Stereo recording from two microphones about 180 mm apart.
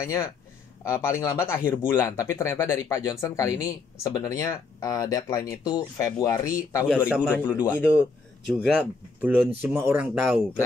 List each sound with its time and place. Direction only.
0.0 s speech: 15° left (ahead or behind)
6.9 s speech: 5° right (ahead or behind)
7.2 s speech: 10° left (ahead or behind)
8.5 s speech: 5° right (ahead or behind)